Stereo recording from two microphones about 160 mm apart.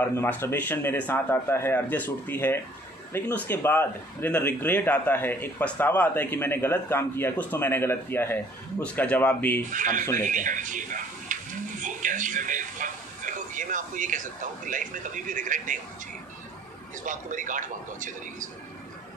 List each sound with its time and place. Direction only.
0.0 s speech: 15° left (ahead or behind)
9.7 s a man's voice: 55° right (ahead or behind)
17.0 s a man's voice: 55° right (ahead or behind)